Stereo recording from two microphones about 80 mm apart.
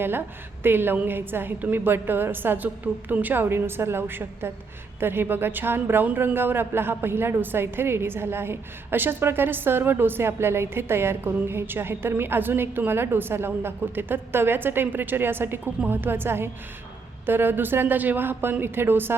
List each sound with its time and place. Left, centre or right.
0.6 s speech: right